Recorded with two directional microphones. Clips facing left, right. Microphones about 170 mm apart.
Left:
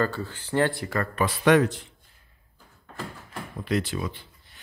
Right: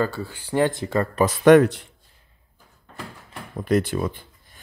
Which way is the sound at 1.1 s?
40° right (ahead or behind).